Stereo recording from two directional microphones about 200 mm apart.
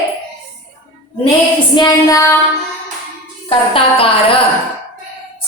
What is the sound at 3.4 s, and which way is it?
Music, 30° left (ahead or behind).